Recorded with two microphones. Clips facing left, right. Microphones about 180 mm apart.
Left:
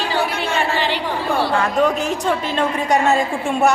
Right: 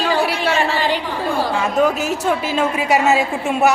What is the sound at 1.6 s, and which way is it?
A woman's voice, 5° right (ahead or behind).